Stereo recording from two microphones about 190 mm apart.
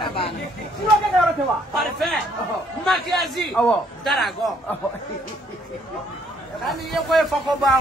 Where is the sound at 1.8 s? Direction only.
Centre (ahead or behind).